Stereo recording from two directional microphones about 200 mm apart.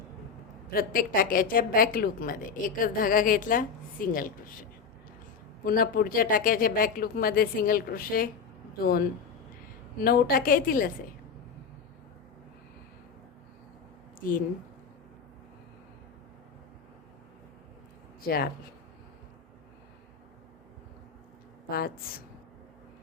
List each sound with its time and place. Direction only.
0.7 s a woman's voice: 45° left (ahead or behind)
5.6 s a woman's voice: 45° left (ahead or behind)
14.2 s speech: 45° left (ahead or behind)
18.2 s speech: 50° left (ahead or behind)
21.7 s a woman's voice: 50° left (ahead or behind)